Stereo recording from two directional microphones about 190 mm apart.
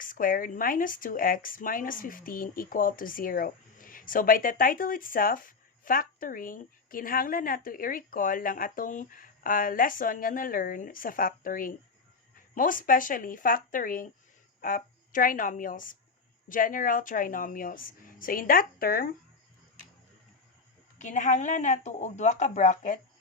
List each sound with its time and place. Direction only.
0.0 s a woman's voice: 45° left (ahead or behind)
21.0 s speech: 40° left (ahead or behind)